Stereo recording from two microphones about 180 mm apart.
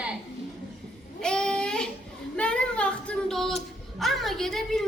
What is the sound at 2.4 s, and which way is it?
Child singing, 5° left (ahead or behind).